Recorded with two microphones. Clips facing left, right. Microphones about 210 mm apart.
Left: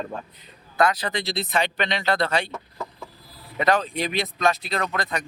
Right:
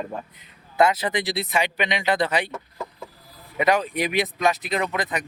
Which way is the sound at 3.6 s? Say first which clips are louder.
Right 1 dB; 15° right (ahead or behind).